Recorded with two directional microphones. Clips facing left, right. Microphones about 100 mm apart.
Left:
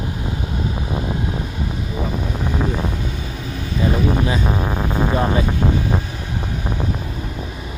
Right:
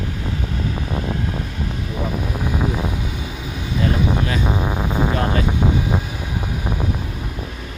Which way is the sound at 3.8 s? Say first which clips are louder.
Left 2 dB; 15° left (ahead or behind).